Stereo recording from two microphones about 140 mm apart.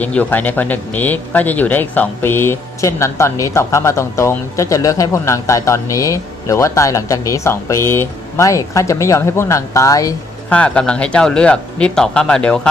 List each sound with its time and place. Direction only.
0.0 s speech: 10° left (ahead or behind)
10.5 s speech: 10° left (ahead or behind)